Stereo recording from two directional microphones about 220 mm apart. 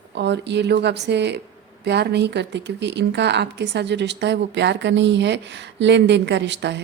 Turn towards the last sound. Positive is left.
turn(degrees=-50)  # may be behind; listen again after turning